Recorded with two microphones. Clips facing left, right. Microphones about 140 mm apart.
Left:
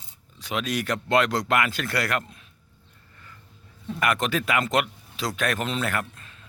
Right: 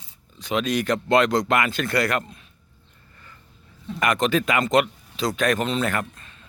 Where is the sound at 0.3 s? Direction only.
5° left (ahead or behind).